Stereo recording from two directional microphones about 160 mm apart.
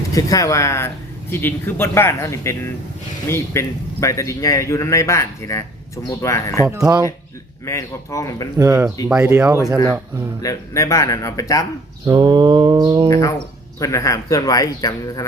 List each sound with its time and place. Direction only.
0.1 s a man's voice: 20° left (ahead or behind)
6.7 s mantra: 20° right (ahead or behind)
7.6 s speech: 20° left (ahead or behind)
9.0 s speech: 15° right (ahead or behind)
10.4 s speech: 20° left (ahead or behind)
12.0 s mantra: 25° right (ahead or behind)
13.1 s speech: 20° left (ahead or behind)